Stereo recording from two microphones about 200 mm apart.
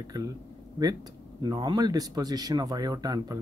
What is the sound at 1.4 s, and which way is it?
Speech, 20° right (ahead or behind).